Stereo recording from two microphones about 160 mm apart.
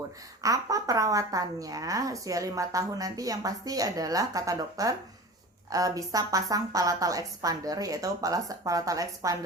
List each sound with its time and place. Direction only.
0.4 s a woman's voice: 20° right (ahead or behind)